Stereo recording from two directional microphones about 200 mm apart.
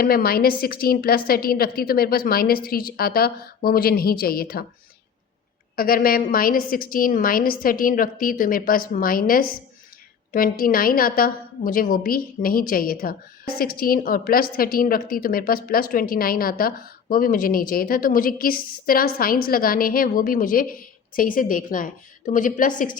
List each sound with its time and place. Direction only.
0.0 s a woman's voice: 50° left (ahead or behind)
5.7 s a woman's voice: 45° left (ahead or behind)